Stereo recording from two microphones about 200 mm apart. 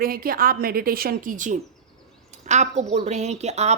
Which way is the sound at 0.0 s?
45° right (ahead or behind).